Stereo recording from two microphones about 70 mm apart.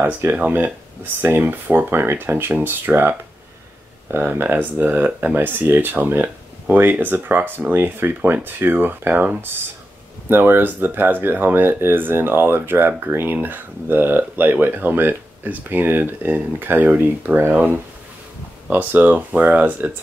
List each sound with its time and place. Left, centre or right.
0.0 s speech: right